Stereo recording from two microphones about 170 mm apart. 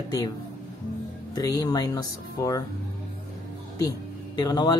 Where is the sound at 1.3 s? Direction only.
20° left (ahead or behind).